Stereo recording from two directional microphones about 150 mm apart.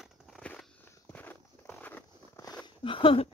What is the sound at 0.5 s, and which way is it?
Walk, 10° left (ahead or behind).